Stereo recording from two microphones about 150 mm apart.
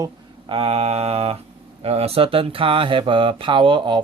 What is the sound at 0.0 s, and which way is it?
Speech, 35° right (ahead or behind).